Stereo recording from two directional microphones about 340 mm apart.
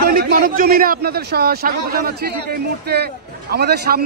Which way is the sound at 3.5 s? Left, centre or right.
Right.